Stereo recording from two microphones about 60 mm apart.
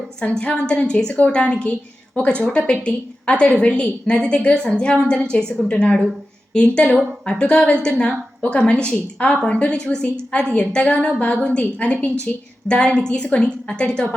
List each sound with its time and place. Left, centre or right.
0.2 s a woman's voice: centre